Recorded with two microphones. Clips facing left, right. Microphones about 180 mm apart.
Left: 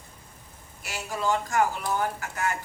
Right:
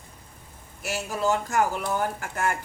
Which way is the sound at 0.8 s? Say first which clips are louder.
Right 4 dB; 45° right (ahead or behind).